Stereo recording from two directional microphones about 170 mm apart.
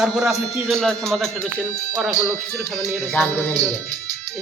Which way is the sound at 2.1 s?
15° left (ahead or behind).